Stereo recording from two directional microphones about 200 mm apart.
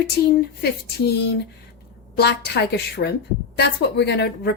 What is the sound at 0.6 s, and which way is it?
A woman's voice, 55° left (ahead or behind).